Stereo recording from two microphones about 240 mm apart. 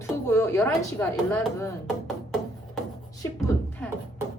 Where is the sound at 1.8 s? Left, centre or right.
Centre.